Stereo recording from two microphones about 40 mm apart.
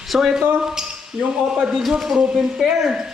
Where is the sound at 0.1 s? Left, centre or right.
Centre.